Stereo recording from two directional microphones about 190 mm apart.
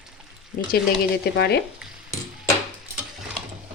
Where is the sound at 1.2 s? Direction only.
60° left (ahead or behind).